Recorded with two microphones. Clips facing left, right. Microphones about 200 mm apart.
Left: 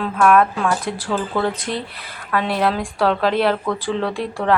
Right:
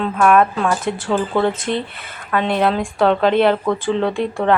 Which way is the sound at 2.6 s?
Centre (ahead or behind).